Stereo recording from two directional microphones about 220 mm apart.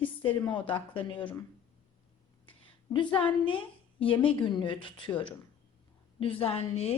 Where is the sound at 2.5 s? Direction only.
20° left (ahead or behind).